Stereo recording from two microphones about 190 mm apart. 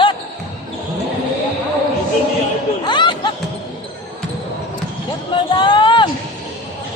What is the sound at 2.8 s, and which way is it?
Chatter, 25° left (ahead or behind).